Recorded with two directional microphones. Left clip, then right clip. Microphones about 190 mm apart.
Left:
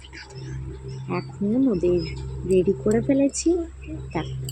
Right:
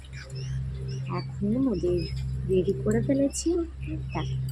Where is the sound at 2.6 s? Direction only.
15° left (ahead or behind).